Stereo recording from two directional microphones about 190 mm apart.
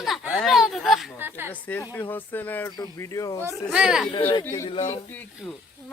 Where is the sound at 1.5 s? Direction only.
10° left (ahead or behind).